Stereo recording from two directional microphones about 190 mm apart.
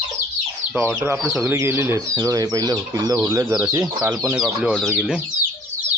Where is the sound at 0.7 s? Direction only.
10° right (ahead or behind).